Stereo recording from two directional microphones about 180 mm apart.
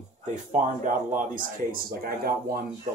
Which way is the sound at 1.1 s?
50° right (ahead or behind).